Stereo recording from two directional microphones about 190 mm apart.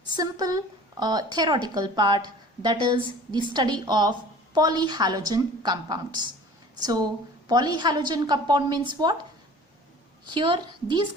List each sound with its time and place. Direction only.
0.2 s a woman's voice: 20° right (ahead or behind)
10.3 s a woman's voice: 25° right (ahead or behind)